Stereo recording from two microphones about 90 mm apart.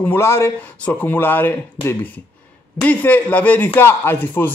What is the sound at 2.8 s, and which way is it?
Speech, 20° left (ahead or behind).